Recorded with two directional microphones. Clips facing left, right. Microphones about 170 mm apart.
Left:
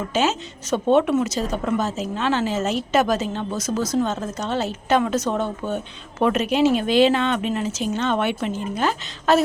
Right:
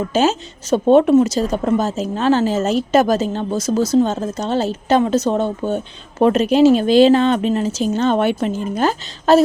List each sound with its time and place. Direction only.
0.1 s a woman's voice: 35° right (ahead or behind)